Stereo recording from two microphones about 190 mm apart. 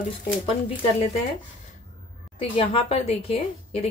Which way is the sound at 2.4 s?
30° left (ahead or behind).